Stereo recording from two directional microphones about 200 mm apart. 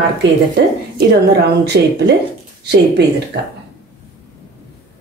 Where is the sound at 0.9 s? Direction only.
55° right (ahead or behind).